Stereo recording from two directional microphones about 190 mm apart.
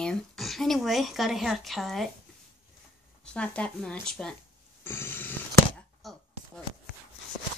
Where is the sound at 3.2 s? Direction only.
5° left (ahead or behind).